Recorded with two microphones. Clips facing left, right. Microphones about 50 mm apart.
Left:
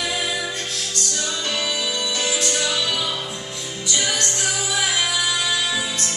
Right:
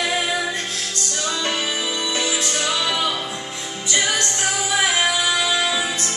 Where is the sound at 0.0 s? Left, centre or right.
Right.